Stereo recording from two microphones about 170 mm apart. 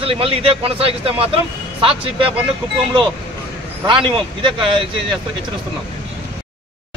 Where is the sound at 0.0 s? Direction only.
35° right (ahead or behind).